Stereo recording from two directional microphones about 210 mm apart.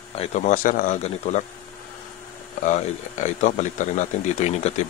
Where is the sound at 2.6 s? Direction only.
35° left (ahead or behind).